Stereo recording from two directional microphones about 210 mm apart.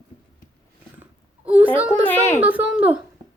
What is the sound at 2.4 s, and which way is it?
Speech, 10° right (ahead or behind).